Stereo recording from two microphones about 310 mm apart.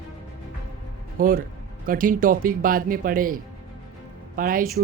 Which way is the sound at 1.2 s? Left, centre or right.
Right.